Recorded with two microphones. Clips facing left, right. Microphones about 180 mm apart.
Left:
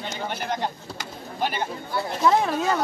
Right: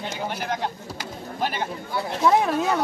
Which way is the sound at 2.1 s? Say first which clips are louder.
Right 1 dB; centre (ahead or behind).